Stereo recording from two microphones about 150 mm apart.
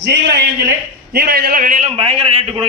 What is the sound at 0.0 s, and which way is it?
A man's voice, 90° right.